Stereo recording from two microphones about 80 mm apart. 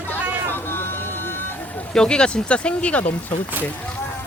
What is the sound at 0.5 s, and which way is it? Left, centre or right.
Vehicle, left.